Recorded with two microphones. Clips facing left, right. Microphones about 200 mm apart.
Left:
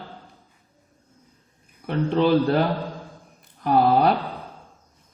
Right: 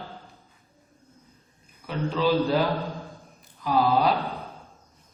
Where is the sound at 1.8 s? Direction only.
60° left (ahead or behind).